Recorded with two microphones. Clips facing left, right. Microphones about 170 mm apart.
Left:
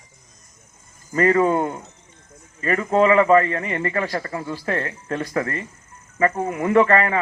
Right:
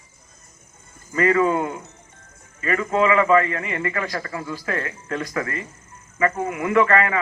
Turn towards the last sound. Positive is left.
turn(degrees=40)  # may be behind; listen again after turning